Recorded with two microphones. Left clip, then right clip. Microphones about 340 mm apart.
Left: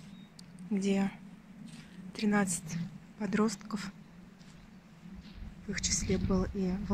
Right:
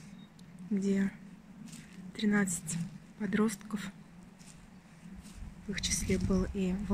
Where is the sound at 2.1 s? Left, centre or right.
Centre.